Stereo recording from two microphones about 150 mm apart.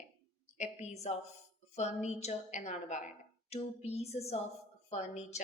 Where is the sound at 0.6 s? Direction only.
50° left (ahead or behind).